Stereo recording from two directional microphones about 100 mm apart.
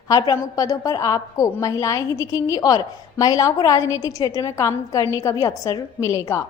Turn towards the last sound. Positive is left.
turn(degrees=30)  # may be behind; listen again after turning